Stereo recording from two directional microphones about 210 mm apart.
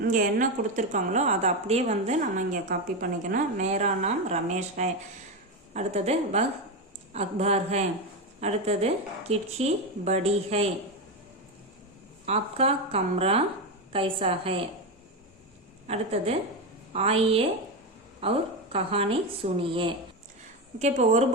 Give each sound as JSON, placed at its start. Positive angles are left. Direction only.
{"t": 0.0, "sound": "a woman's voice", "side_deg": -40}
{"t": 12.2, "sound": "a woman's voice", "side_deg": -30}
{"t": 15.9, "sound": "a woman's voice", "side_deg": -30}